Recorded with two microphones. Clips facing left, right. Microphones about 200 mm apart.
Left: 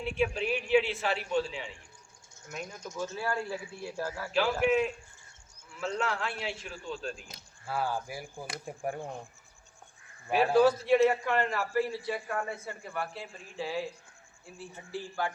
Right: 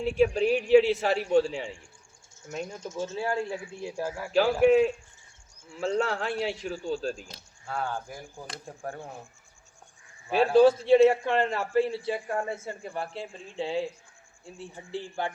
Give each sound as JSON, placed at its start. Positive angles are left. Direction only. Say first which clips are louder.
{"t": 0.0, "sound": "a man's voice", "louder": "right 7 dB", "side_deg": -40}
{"t": 2.5, "sound": "a man's voice", "louder": "right 5 dB", "side_deg": -25}
{"t": 4.4, "sound": "a man's voice", "louder": "right 6 dB", "side_deg": -40}
{"t": 7.7, "sound": "speech", "louder": "even", "side_deg": 5}
{"t": 10.3, "sound": "a man's voice", "louder": "right 4 dB", "side_deg": -30}